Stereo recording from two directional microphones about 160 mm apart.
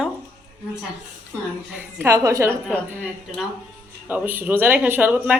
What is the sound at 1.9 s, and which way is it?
Speech, 20° right (ahead or behind).